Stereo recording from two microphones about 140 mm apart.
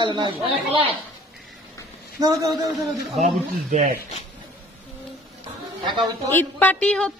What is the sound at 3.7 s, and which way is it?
Speech, 60° right (ahead or behind).